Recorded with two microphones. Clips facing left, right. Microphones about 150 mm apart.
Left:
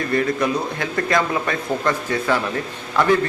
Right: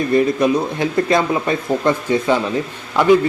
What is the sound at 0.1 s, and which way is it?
A man's voice, 20° right (ahead or behind).